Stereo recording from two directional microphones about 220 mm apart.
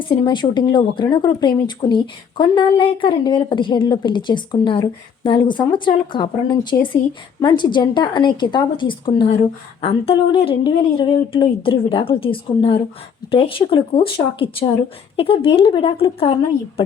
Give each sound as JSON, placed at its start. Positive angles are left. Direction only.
{"t": 0.0, "sound": "a woman's voice", "side_deg": 20}